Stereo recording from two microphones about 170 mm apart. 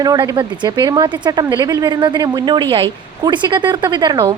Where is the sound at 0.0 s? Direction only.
25° right (ahead or behind).